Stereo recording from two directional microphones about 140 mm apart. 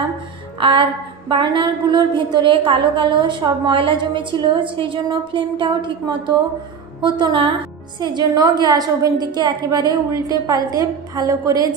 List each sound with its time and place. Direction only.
0.6 s music: 35° right (ahead or behind)
1.3 s a woman's voice: 35° right (ahead or behind)